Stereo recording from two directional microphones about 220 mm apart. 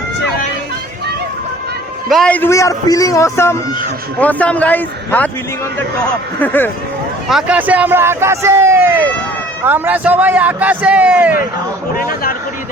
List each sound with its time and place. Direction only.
2.0 s a man's voice: centre (ahead or behind)
6.4 s a man's voice: 10° left (ahead or behind)
7.3 s speech: 5° right (ahead or behind)
11.9 s speech: 40° left (ahead or behind)